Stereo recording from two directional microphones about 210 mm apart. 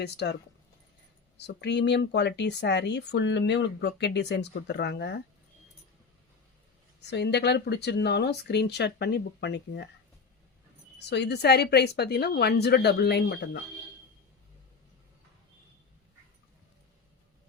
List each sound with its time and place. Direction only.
0.0 s speech: 50° left (ahead or behind)
1.4 s speech: 55° left (ahead or behind)
7.1 s speech: 55° left (ahead or behind)
11.0 s speech: 55° left (ahead or behind)